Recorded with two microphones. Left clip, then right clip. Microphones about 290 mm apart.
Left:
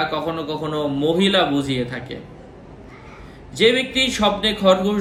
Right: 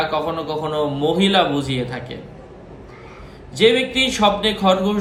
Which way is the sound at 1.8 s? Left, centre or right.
Right.